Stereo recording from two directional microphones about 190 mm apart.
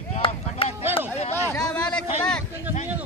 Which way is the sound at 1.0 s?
35° left (ahead or behind).